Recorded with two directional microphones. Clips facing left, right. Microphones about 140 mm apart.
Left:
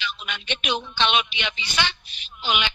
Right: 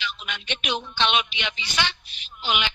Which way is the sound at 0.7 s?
70° left (ahead or behind).